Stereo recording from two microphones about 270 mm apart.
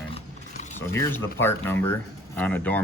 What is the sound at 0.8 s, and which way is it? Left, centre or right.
Speech, centre.